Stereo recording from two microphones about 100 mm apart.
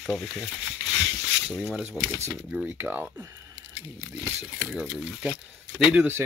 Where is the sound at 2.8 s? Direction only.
20° right (ahead or behind).